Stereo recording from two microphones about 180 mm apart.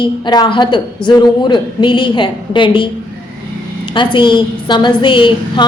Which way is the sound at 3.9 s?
25° left (ahead or behind).